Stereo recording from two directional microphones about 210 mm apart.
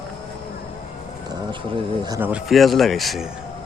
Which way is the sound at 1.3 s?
25° right (ahead or behind).